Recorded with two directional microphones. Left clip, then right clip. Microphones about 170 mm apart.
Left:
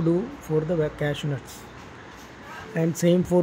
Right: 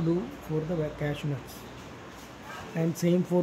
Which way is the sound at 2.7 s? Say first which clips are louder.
Left 6 dB; 20° left (ahead or behind).